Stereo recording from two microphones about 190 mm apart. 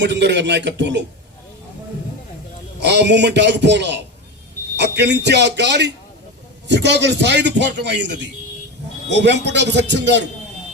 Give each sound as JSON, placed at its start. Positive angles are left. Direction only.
{"t": 0.0, "sound": "a man's voice", "side_deg": -65}
{"t": 2.8, "sound": "a man's voice", "side_deg": -60}